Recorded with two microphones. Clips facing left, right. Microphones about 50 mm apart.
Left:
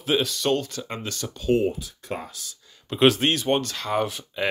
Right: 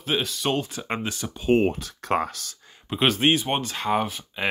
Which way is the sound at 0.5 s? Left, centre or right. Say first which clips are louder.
Left 1 dB; centre.